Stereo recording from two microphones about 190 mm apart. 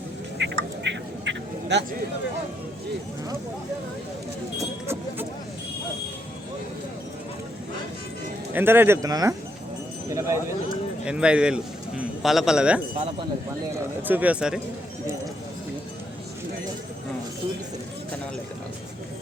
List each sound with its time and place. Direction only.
0.4 s a sound: 65° right (ahead or behind)
4.5 s vehicle: 15° right (ahead or behind)
8.5 s speech: 10° right (ahead or behind)
10.1 s bird: 15° right (ahead or behind)
11.0 s a man's voice: 5° right (ahead or behind)
14.0 s speech: 10° right (ahead or behind)